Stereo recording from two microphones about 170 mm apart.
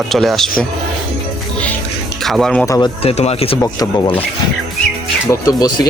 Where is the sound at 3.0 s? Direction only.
40° left (ahead or behind).